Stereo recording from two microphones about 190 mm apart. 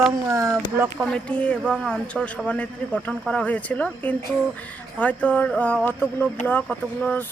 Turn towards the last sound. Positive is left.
turn(degrees=5)  # may be behind; listen again after turning